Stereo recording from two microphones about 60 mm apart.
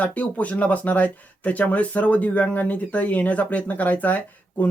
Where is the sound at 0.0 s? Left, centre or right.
Left.